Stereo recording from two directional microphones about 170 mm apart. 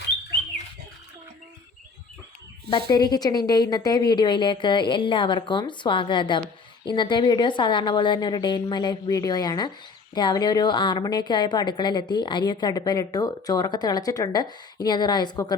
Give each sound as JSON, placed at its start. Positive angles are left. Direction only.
{"t": 2.6, "sound": "a woman's voice", "side_deg": 25}